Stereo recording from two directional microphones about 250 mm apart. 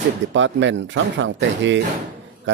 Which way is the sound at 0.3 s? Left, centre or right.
Right.